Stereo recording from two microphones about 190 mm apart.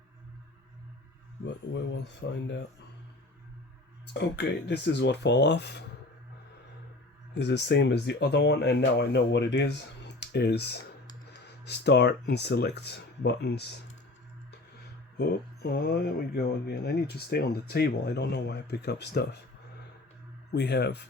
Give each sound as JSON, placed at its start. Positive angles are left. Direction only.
{"t": 1.5, "sound": "a sound", "side_deg": 70}
{"t": 2.2, "sound": "speech", "side_deg": 75}
{"t": 4.1, "sound": "speech", "side_deg": 60}
{"t": 7.3, "sound": "speech", "side_deg": 65}
{"t": 15.2, "sound": "speech", "side_deg": 60}
{"t": 20.5, "sound": "speech", "side_deg": 60}